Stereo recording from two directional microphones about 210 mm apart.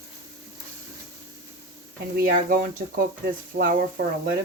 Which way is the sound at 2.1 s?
40° right (ahead or behind).